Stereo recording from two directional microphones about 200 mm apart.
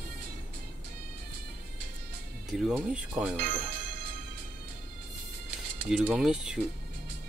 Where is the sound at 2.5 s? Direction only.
Centre (ahead or behind).